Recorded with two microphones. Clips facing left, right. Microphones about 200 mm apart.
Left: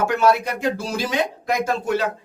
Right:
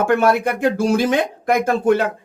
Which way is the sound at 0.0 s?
55° right (ahead or behind).